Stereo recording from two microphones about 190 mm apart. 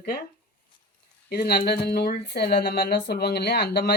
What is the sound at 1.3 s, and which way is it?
Speech, 55° left (ahead or behind).